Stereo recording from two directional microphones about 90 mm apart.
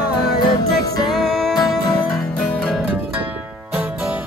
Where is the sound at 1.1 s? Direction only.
5° left (ahead or behind).